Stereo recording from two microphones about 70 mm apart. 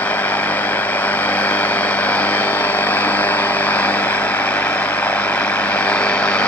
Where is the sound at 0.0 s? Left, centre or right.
Left.